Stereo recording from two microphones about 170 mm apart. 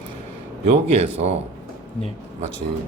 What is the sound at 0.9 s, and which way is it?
Speech, 35° right (ahead or behind).